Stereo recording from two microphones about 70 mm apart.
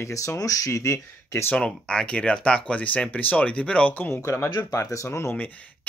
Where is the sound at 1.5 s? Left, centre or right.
Centre.